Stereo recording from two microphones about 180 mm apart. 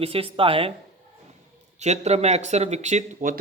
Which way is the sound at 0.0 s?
30° right (ahead or behind).